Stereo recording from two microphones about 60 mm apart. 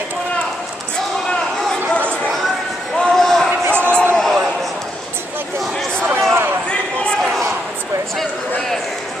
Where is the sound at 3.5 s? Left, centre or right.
Right.